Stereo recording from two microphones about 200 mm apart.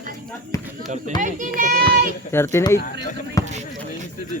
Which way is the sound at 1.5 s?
45° right (ahead or behind).